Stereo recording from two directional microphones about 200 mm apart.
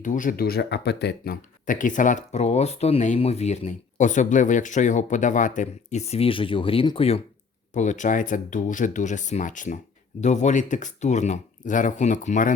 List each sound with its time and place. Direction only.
0.0 s speech: 40° left (ahead or behind)